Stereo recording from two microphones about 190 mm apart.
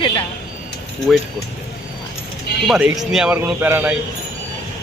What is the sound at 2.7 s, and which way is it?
Speech, 5° right (ahead or behind).